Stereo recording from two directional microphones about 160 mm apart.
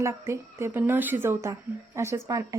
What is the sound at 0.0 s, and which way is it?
Speech, 15° right (ahead or behind).